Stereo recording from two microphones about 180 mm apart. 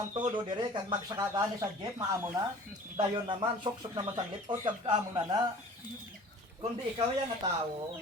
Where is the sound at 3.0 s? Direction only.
25° right (ahead or behind).